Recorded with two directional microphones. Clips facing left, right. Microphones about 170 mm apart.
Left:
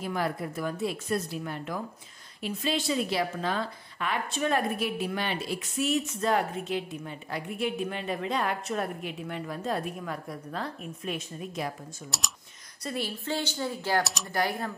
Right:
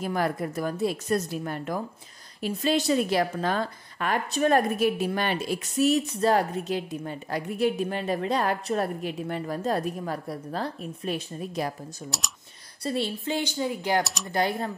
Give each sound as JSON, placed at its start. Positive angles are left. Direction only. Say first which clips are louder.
{"t": 0.0, "sound": "a woman's voice", "louder": "right 4 dB", "side_deg": -45}
{"t": 12.8, "sound": "speech", "louder": "right 5 dB", "side_deg": -30}
{"t": 13.2, "sound": "a woman's voice", "louder": "right 3 dB", "side_deg": -15}
{"t": 14.0, "sound": "speech", "louder": "right 1 dB", "side_deg": 0}
{"t": 14.3, "sound": "speech", "louder": "right 3 dB", "side_deg": -25}